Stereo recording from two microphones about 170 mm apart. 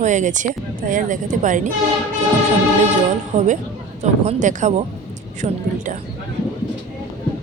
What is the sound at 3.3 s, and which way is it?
A woman's voice, 45° right (ahead or behind).